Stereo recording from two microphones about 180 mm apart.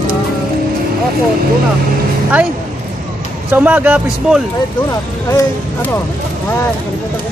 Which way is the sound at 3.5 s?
10° right (ahead or behind).